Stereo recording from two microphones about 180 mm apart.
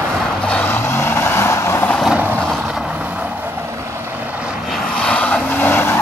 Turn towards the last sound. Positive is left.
turn(degrees=10)  # may be behind; listen again after turning